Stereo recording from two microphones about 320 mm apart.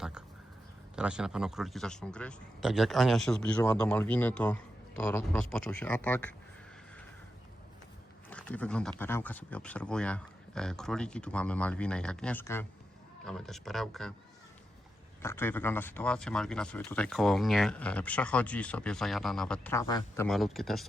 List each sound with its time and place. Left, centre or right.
0.9 s a man's voice: centre
8.3 s a man's voice: centre
15.2 s a man's voice: centre